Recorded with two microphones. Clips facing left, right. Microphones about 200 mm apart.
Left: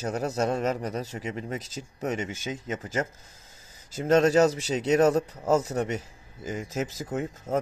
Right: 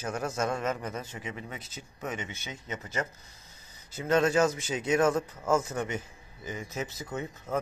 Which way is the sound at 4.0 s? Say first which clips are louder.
Left 5 dB; 40° left (ahead or behind).